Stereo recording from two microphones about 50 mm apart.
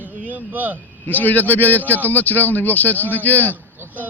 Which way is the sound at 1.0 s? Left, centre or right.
Left.